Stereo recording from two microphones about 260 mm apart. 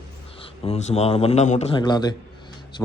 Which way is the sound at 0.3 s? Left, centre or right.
Left.